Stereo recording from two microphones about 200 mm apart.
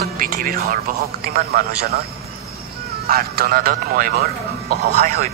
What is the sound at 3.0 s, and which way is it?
A man's voice, 50° right (ahead or behind).